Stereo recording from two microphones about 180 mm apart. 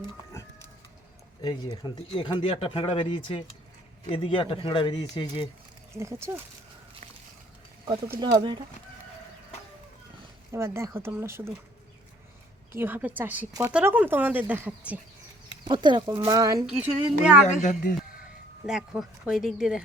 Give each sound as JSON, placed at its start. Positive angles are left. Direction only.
{"t": 1.4, "sound": "speech", "side_deg": 25}
{"t": 5.9, "sound": "speech", "side_deg": -15}
{"t": 8.2, "sound": "speech", "side_deg": -25}
{"t": 10.5, "sound": "speech", "side_deg": -15}
{"t": 12.7, "sound": "speech", "side_deg": -10}
{"t": 15.6, "sound": "speech", "side_deg": -25}
{"t": 16.6, "sound": "speech", "side_deg": -5}
{"t": 17.4, "sound": "a woman's voice", "side_deg": 45}
{"t": 18.6, "sound": "speech", "side_deg": -5}